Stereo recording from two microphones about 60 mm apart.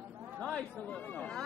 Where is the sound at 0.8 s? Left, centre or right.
Left.